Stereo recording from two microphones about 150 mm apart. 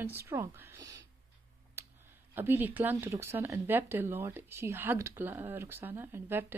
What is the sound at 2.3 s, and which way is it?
Speech, 15° right (ahead or behind).